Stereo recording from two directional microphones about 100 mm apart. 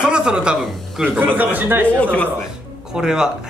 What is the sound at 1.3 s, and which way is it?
Speech, 15° right (ahead or behind).